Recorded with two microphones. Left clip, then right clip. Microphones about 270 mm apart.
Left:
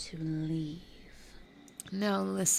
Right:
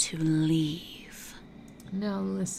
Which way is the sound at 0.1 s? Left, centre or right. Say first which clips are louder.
Right 10 dB; right.